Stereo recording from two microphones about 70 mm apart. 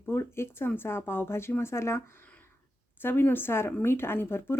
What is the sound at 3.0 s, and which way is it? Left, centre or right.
Speech, left.